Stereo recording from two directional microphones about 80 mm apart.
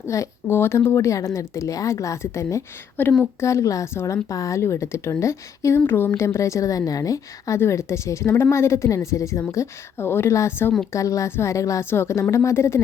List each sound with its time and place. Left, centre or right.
0.1 s a woman's voice: left
3.0 s speech: centre
3.4 s a woman's voice: left